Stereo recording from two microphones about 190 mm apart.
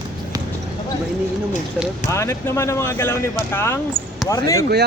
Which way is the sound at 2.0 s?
15° left (ahead or behind).